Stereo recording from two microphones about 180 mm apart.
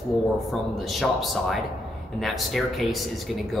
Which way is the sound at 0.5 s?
Centre (ahead or behind).